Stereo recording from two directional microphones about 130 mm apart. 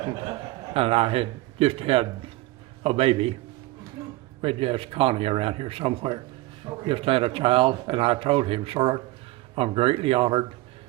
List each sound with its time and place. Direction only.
0.0 s a man's voice: 40° right (ahead or behind)
4.4 s speech: 45° right (ahead or behind)